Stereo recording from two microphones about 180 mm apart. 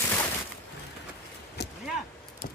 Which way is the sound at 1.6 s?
70° left (ahead or behind).